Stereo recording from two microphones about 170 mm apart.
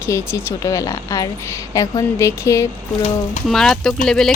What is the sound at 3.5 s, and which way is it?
Speech, centre (ahead or behind).